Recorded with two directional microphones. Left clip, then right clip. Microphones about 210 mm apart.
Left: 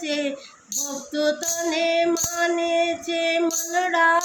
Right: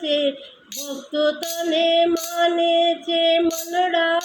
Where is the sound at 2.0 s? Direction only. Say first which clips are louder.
Right 3 dB; 5° left (ahead or behind).